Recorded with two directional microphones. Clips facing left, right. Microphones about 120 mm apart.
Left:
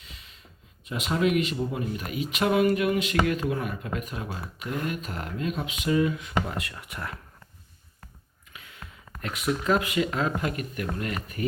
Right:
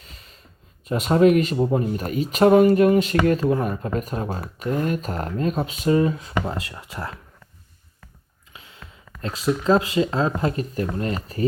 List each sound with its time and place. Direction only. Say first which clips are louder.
0.0 s a sound: right 2 dB; 40° right (ahead or behind)
0.9 s speech: right 9 dB; 40° right (ahead or behind)
8.5 s speech: right 1 dB; 25° right (ahead or behind)